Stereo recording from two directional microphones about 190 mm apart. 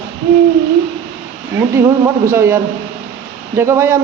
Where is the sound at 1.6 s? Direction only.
15° right (ahead or behind).